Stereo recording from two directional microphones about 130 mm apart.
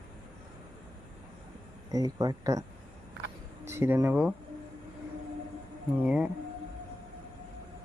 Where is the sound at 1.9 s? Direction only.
30° right (ahead or behind).